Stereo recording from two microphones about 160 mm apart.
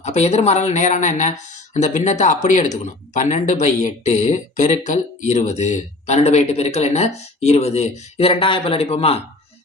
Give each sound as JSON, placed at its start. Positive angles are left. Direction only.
{"t": 0.0, "sound": "speech", "side_deg": 45}